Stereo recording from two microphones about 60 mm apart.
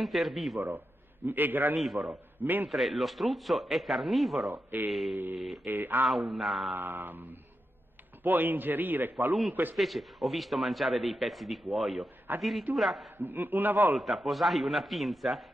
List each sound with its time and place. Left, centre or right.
0.0 s speech: centre
0.6 s a man's voice: right
2.7 s speech: centre
4.5 s a man's voice: right
5.4 s speech: centre
5.7 s a man's voice: right
6.0 s speech: centre
6.7 s a man's voice: right
9.8 s speech: centre
13.2 s a man's voice: right
13.9 s speech: centre